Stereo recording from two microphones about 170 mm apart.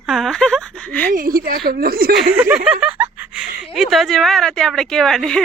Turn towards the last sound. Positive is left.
turn(degrees=5)  # may be behind; listen again after turning